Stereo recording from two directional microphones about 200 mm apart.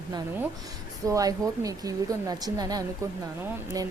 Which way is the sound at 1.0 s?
15° right (ahead or behind).